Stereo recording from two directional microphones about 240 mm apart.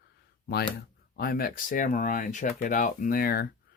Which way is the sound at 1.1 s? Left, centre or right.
Left.